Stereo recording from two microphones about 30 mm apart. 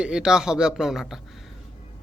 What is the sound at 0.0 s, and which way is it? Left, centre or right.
Speech, right.